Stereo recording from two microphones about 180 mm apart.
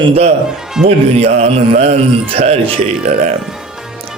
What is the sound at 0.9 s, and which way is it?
Speech, 40° right (ahead or behind).